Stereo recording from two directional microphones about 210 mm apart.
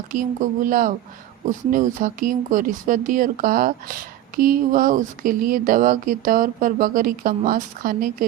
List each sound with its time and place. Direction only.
0.1 s speech: 40° right (ahead or behind)